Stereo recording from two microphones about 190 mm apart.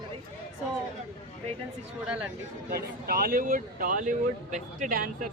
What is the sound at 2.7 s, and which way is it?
Speech, 50° right (ahead or behind).